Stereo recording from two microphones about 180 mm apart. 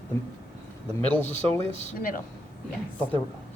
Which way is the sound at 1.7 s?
40° left (ahead or behind).